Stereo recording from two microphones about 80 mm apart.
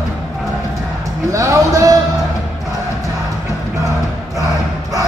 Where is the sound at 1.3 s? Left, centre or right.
Right.